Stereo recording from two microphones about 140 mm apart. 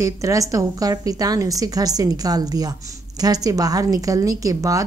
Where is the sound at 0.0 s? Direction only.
25° right (ahead or behind).